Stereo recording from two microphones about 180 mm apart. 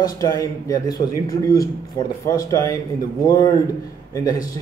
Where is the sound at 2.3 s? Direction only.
20° left (ahead or behind).